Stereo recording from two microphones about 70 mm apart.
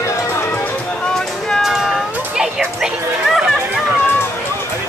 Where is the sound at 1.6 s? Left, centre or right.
Centre.